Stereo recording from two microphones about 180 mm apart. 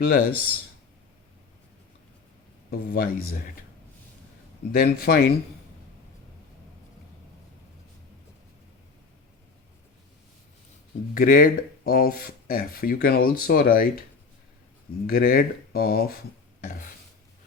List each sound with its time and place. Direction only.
0.0 s speech: 55° left (ahead or behind)
2.6 s speech: 55° left (ahead or behind)
4.8 s speech: 55° left (ahead or behind)
11.1 s speech: 50° left (ahead or behind)
15.0 s speech: 55° left (ahead or behind)